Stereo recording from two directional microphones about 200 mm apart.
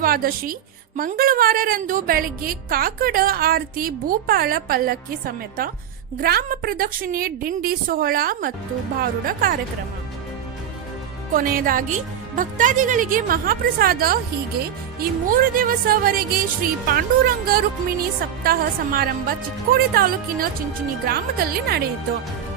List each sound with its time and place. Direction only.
0.0 s a woman's voice: 45° right (ahead or behind)
11.3 s a woman's voice: 45° right (ahead or behind)
15.3 s a woman's voice: 45° right (ahead or behind)